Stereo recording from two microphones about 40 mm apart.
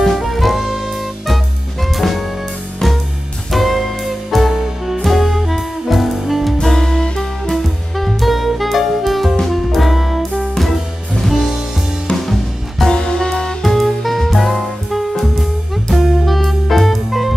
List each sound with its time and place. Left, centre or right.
0.0 s music: centre
3.5 s music: centre
6.6 s music: centre
12.3 s music: centre
12.9 s music: centre
13.6 s music: centre